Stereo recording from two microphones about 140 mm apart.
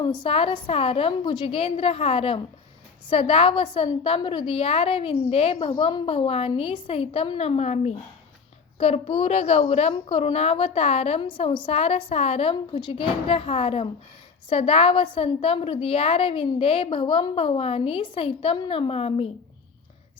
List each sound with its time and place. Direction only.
0.2 s a woman's voice: 40° left (ahead or behind)